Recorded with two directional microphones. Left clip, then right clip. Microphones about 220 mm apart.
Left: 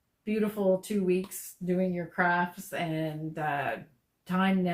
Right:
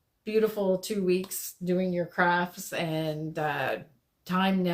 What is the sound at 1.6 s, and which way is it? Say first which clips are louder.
Speech: right 2 dB; 45° right (ahead or behind).